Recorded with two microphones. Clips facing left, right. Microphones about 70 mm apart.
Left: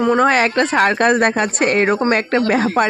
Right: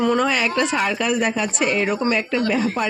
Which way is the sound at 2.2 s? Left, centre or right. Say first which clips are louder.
Left 4 dB; left.